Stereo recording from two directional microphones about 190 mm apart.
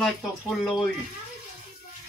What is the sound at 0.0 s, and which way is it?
Speech, centre (ahead or behind).